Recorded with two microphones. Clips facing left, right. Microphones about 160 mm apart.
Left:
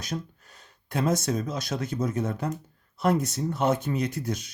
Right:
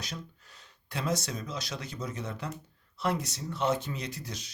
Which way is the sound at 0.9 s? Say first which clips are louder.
Left 7 dB; 50° left (ahead or behind).